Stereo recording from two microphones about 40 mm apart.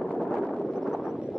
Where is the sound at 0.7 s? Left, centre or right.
Centre.